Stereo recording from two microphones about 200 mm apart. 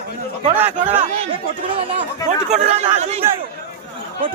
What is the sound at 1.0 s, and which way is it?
Speech, 35° right (ahead or behind).